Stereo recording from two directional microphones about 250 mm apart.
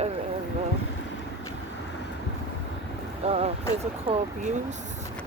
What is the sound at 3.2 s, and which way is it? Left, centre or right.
Speech, right.